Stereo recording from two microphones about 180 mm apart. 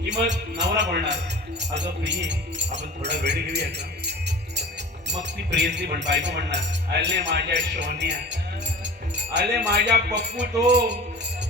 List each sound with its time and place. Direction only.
0.0 s speech: 75° right (ahead or behind)